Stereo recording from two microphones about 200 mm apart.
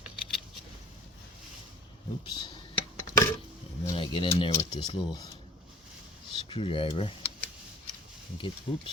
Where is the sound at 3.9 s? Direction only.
25° left (ahead or behind).